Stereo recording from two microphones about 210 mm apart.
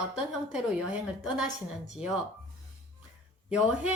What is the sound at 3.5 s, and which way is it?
Speech, 5° right (ahead or behind).